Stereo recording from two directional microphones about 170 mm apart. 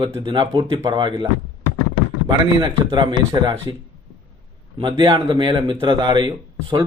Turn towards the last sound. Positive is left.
turn(degrees=-30)  # may be behind; listen again after turning